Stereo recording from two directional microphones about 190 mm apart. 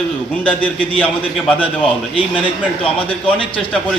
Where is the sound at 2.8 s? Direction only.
30° left (ahead or behind).